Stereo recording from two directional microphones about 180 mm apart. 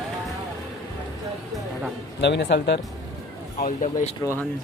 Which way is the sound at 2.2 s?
70° left (ahead or behind).